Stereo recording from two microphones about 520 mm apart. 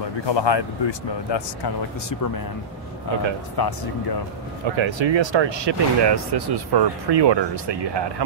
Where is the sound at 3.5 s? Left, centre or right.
Left.